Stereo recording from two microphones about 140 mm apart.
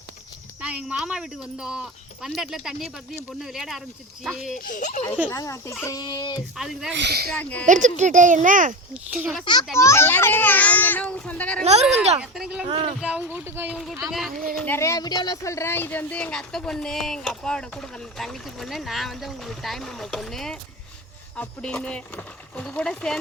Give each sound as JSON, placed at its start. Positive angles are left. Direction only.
{"t": 0.6, "sound": "speech", "side_deg": -10}
{"t": 4.5, "sound": "speech", "side_deg": 70}
{"t": 5.3, "sound": "a child's voice", "side_deg": 20}
{"t": 6.6, "sound": "speech", "side_deg": -5}
{"t": 7.3, "sound": "a child's voice", "side_deg": 10}
{"t": 7.7, "sound": "speech", "side_deg": -60}
{"t": 8.9, "sound": "speech", "side_deg": -5}
{"t": 9.4, "sound": "a child's voice", "side_deg": 30}
{"t": 9.7, "sound": "a child's voice", "side_deg": 20}
{"t": 11.6, "sound": "speech", "side_deg": -50}
{"t": 12.2, "sound": "speech", "side_deg": -5}
{"t": 14.5, "sound": "a child's voice", "side_deg": 15}